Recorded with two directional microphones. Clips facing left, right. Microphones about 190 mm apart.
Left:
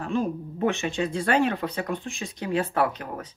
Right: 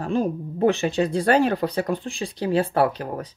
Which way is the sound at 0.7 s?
35° right (ahead or behind).